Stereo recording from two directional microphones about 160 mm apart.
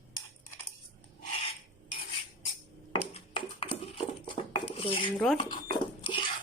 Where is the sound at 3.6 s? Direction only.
35° left (ahead or behind).